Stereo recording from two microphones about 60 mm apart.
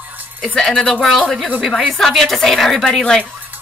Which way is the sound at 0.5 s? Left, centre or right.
Centre.